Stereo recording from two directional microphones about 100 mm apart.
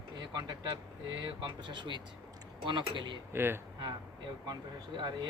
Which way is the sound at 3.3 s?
25° right (ahead or behind).